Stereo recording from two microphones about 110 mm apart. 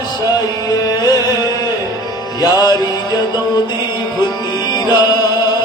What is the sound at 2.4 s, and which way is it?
Mantra, 35° left (ahead or behind).